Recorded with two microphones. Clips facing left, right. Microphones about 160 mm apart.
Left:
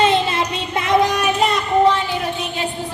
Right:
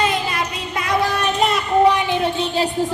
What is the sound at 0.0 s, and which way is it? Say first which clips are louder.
Child singing: left 4 dB; 25° left (ahead or behind).